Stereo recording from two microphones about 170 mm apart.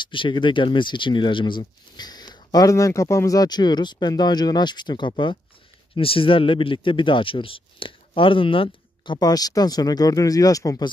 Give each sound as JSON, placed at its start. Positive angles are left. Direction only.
{"t": 0.0, "sound": "speech", "side_deg": 30}